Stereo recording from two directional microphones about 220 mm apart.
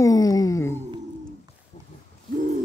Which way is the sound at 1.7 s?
35° left (ahead or behind).